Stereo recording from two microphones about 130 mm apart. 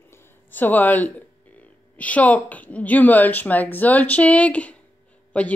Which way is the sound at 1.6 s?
10° left (ahead or behind).